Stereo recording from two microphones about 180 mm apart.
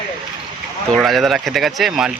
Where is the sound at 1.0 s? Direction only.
Centre (ahead or behind).